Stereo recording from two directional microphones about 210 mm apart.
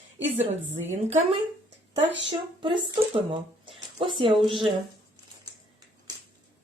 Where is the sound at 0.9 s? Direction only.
35° right (ahead or behind).